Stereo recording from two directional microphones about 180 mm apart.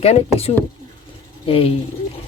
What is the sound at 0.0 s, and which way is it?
A man's voice, 35° left (ahead or behind).